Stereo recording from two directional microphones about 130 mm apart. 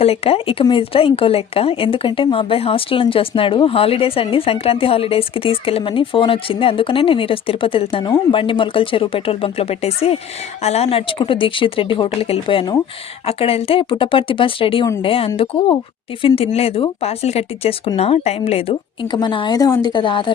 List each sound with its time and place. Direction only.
0.0 s a woman's voice: 50° left (ahead or behind)
19.1 s speech: 35° left (ahead or behind)